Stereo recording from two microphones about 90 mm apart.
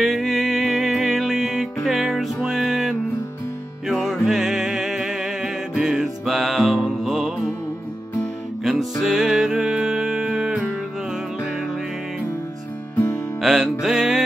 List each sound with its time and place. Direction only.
0.0 s music: centre (ahead or behind)
8.6 s music: centre (ahead or behind)
13.4 s music: 5° right (ahead or behind)